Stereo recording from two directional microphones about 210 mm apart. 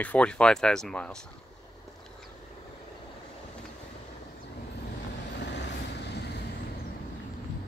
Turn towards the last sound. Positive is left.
turn(degrees=55)  # may be behind; listen again after turning